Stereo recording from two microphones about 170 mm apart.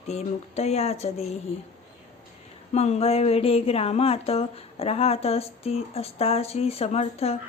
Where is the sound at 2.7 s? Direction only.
40° left (ahead or behind).